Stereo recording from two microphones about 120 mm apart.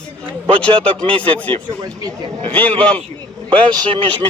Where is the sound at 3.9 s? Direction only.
40° right (ahead or behind).